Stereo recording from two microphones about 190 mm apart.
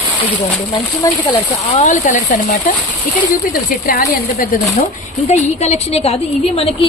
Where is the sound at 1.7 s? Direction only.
40° left (ahead or behind).